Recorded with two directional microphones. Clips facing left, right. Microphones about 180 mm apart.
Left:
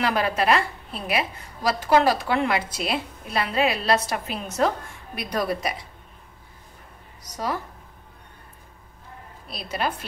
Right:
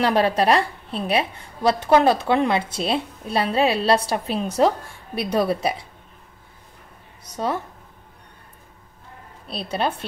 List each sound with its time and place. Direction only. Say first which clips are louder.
0.0 s a woman's voice: right 4 dB; 30° right (ahead or behind)
7.3 s a woman's voice: right 3 dB; 25° right (ahead or behind)
9.5 s a woman's voice: right 3 dB; 30° right (ahead or behind)